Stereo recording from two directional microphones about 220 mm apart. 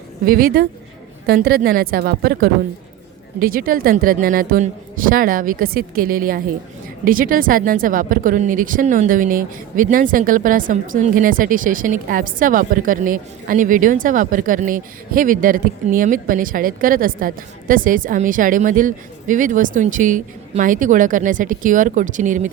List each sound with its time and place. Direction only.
0.3 s a woman's voice: 40° right (ahead or behind)